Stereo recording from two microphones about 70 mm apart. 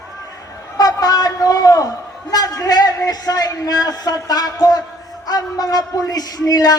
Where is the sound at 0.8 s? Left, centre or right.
Left.